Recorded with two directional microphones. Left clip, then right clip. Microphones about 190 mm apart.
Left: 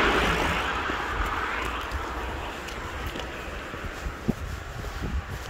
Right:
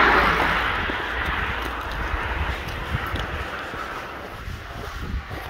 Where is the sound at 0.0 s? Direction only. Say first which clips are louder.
Right 6 dB; 20° left (ahead or behind).